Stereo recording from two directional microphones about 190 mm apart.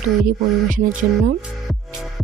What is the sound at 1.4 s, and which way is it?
Music, centre (ahead or behind).